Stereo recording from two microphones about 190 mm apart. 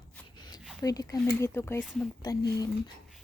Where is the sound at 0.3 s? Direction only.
25° left (ahead or behind).